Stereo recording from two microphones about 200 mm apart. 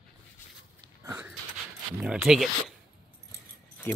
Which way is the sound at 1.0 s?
10° right (ahead or behind).